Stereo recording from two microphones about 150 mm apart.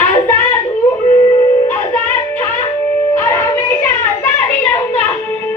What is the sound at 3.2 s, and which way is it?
Child singing, 20° left (ahead or behind).